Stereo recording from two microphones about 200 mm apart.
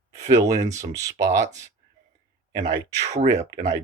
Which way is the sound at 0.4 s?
35° right (ahead or behind).